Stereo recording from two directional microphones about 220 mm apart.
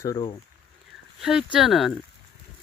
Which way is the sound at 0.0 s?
20° left (ahead or behind).